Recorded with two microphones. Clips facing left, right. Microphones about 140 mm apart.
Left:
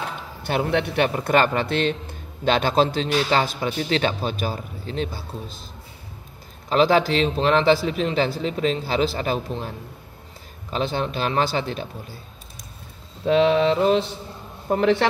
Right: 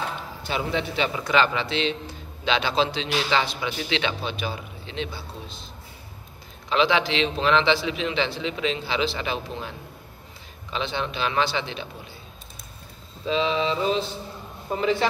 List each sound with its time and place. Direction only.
0.4 s a man's voice: 55° left (ahead or behind)
6.7 s a man's voice: 45° left (ahead or behind)
13.2 s mantra: 60° left (ahead or behind)